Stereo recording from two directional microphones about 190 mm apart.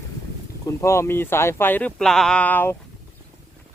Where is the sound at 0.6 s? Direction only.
15° left (ahead or behind).